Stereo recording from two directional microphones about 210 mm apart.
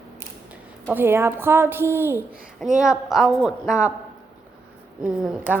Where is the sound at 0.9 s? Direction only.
10° right (ahead or behind).